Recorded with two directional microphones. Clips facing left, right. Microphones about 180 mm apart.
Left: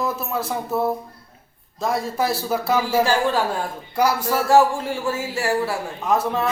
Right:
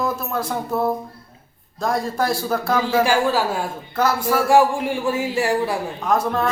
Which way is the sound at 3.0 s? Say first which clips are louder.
Right 1 dB; 5° right (ahead or behind).